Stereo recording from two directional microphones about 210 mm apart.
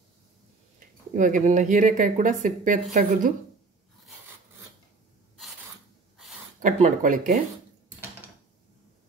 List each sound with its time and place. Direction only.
1.1 s speech: 35° right (ahead or behind)
6.6 s speech: 40° right (ahead or behind)